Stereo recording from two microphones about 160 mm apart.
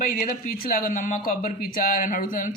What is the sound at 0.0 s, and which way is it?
Speech, 60° left (ahead or behind).